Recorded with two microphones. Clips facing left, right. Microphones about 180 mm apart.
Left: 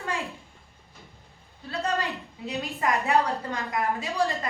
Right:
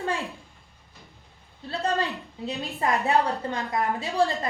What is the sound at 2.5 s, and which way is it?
A woman's voice, 30° right (ahead or behind).